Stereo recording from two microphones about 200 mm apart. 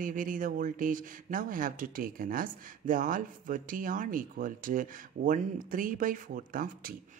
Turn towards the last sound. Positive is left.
turn(degrees=-45)  # may be behind; listen again after turning